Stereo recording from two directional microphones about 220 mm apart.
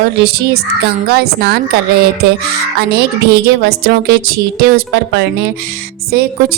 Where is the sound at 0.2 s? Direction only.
45° right (ahead or behind).